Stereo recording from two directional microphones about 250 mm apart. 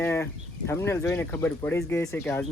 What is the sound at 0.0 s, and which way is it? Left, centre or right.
Livestock, centre.